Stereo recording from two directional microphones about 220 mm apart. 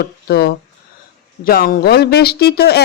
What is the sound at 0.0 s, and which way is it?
Speech, 45° left (ahead or behind).